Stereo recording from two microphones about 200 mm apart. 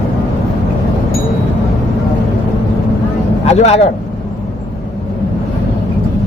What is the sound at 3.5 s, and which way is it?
Speech, 30° left (ahead or behind).